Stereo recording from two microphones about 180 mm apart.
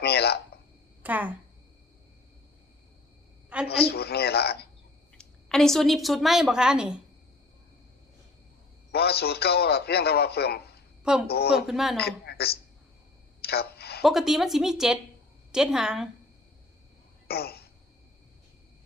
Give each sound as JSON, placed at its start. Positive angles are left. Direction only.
{"t": 0.0, "sound": "a sound", "side_deg": 60}
{"t": 1.0, "sound": "speech", "side_deg": -10}
{"t": 3.7, "sound": "a man's voice", "side_deg": 60}
{"t": 5.1, "sound": "a woman's voice", "side_deg": 5}
{"t": 8.9, "sound": "a man's voice", "side_deg": 60}
{"t": 11.0, "sound": "a woman's voice", "side_deg": -5}
{"t": 11.3, "sound": "a man's voice", "side_deg": 60}
{"t": 11.5, "sound": "a woman's voice", "side_deg": -5}
{"t": 11.9, "sound": "a woman's voice", "side_deg": 65}
{"t": 13.4, "sound": "a sound", "side_deg": 60}
{"t": 14.0, "sound": "a woman's voice", "side_deg": 0}
{"t": 17.2, "sound": "a sound", "side_deg": 60}